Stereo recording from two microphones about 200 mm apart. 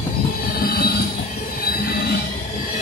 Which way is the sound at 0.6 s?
50° left (ahead or behind).